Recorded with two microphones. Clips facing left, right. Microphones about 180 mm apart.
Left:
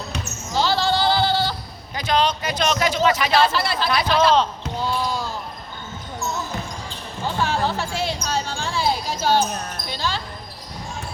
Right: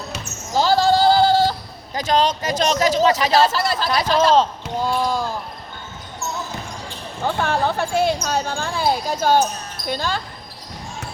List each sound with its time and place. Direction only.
0.5 s a sound: 45° right (ahead or behind)
2.0 s speech: 40° right (ahead or behind)
7.4 s speech: 55° right (ahead or behind)